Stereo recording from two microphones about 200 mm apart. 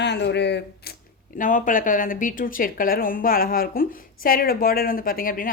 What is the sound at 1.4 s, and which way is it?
Speech, 40° left (ahead or behind).